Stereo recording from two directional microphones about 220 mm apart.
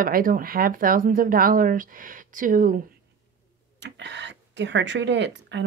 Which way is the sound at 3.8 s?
55° right (ahead or behind).